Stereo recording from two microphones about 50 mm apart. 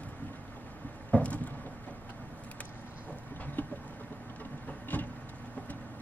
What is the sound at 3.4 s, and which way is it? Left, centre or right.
Vehicle, left.